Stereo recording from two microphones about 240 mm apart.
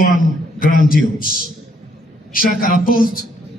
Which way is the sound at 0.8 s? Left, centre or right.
Left.